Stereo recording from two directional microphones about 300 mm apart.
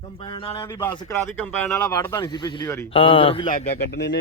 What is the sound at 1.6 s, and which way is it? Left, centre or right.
Speech, centre.